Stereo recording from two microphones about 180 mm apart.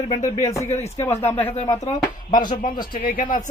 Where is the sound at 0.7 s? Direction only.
40° left (ahead or behind).